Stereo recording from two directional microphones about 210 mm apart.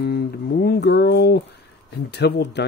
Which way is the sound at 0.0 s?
50° left (ahead or behind).